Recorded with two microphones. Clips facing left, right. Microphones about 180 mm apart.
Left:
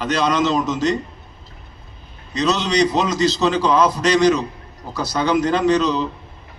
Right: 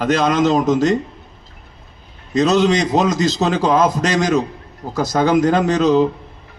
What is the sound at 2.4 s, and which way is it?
A man's voice, 45° right (ahead or behind).